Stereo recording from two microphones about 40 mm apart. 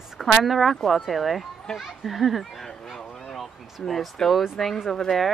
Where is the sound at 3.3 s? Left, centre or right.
Centre.